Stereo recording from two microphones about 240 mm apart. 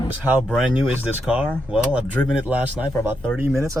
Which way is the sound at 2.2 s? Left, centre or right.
Centre.